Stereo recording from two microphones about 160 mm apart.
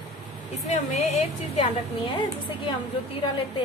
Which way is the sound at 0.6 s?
45° left (ahead or behind).